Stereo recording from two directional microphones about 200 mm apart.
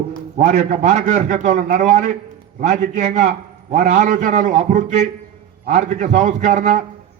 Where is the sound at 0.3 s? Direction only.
35° right (ahead or behind).